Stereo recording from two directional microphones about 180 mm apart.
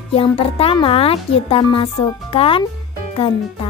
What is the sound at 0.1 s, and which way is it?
Speech, 30° left (ahead or behind).